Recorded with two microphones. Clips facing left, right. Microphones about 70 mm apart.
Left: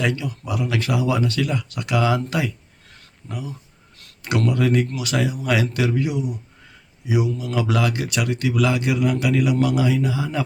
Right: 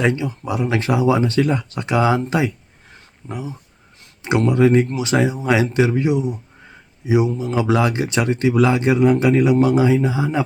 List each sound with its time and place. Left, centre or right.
0.0 s speech: right
2.9 s a sound: right
3.9 s speech: right